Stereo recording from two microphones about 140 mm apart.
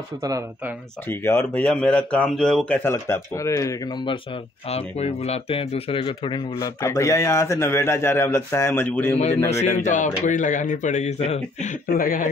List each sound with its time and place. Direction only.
1.0 s a man's voice: 15° left (ahead or behind)
2.8 s speech: 20° left (ahead or behind)
4.6 s speech: 50° left (ahead or behind)
6.8 s a man's voice: 20° left (ahead or behind)
9.5 s a man's voice: 55° left (ahead or behind)
11.9 s speech: 85° left